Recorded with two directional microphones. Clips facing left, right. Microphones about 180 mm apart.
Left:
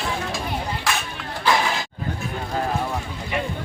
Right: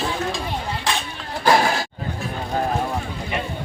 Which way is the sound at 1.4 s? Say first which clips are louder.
Right 4 dB; 45° right (ahead or behind).